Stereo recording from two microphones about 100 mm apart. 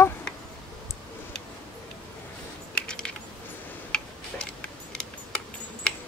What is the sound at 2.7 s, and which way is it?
Typing, 10° left (ahead or behind).